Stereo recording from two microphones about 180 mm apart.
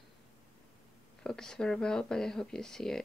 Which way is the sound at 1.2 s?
5° left (ahead or behind).